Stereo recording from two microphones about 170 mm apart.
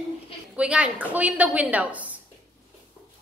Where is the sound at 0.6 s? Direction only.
5° right (ahead or behind).